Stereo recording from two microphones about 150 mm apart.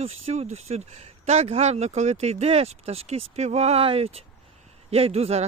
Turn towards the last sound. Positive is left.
turn(degrees=-45)  # may be behind; listen again after turning